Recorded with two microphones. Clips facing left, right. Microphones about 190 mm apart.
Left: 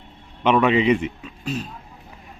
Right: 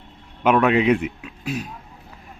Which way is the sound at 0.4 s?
Centre (ahead or behind).